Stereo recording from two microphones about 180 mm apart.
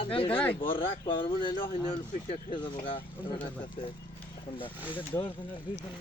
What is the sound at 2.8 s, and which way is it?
Speech, 25° left (ahead or behind).